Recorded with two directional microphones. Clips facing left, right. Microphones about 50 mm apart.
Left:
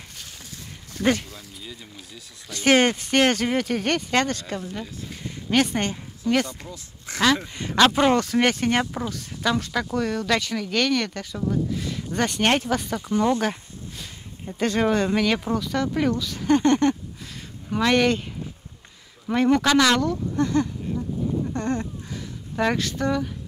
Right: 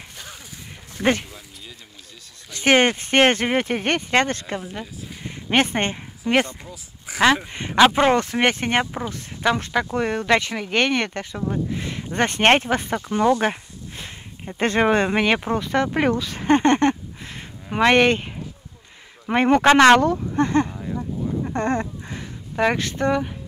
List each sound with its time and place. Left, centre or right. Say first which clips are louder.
0.9 s speech: right 1 dB; right
2.5 s speech: right 1 dB; right
4.6 s speech: right 1 dB; centre
5.2 s speech: right 2 dB; right
6.6 s speech: even; centre
7.9 s speech: right 1 dB; right
21.5 s a sound: right 3 dB; right
22.6 s speech: right 3 dB; right